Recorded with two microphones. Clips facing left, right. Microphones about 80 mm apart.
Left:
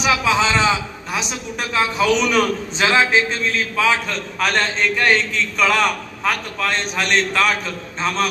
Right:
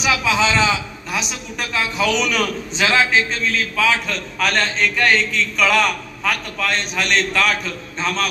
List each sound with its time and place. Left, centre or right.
0.0 s a man's voice: left